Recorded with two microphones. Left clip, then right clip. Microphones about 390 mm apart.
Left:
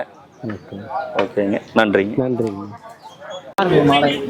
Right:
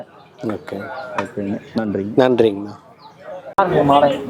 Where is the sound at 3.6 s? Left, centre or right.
Right.